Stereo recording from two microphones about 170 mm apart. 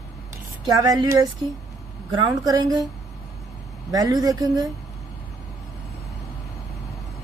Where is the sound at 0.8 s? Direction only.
20° right (ahead or behind).